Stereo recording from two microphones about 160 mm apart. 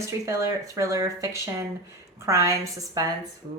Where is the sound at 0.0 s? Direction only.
20° right (ahead or behind).